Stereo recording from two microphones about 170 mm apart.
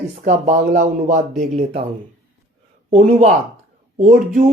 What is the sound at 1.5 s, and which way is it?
Speech, 35° right (ahead or behind).